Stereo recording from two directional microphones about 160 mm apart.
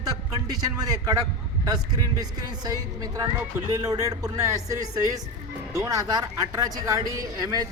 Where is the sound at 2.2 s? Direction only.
25° right (ahead or behind).